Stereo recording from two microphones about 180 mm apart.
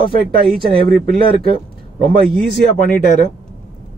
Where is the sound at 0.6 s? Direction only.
60° right (ahead or behind).